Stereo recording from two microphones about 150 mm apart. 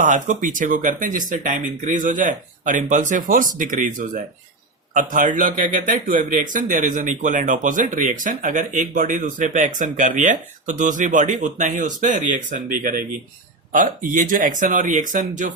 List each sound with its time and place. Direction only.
0.0 s a man's voice: 60° right (ahead or behind)